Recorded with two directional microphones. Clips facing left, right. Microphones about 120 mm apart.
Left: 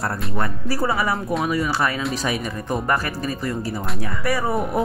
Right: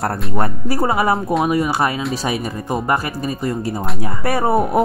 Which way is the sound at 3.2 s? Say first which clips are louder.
Right 4 dB; 30° right (ahead or behind).